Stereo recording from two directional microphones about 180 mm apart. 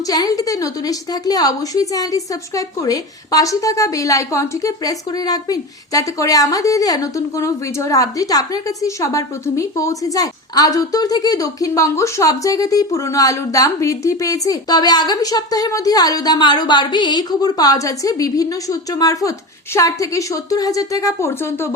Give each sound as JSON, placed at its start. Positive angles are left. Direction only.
{"t": 0.1, "sound": "a woman's voice", "side_deg": 20}